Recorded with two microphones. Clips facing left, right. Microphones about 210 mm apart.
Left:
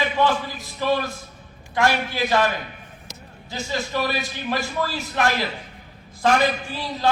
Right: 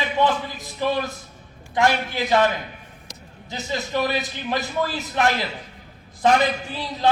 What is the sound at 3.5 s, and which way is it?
A man's voice, 20° right (ahead or behind).